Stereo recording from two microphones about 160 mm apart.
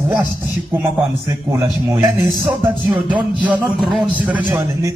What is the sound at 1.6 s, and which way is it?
A man's voice, 15° right (ahead or behind).